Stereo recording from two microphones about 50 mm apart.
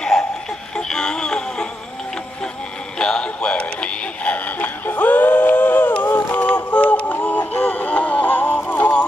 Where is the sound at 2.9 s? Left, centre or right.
Centre; by 5.9 s left.